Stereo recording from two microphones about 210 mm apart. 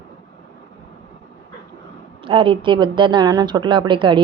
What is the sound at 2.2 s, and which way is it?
Speech, 25° right (ahead or behind).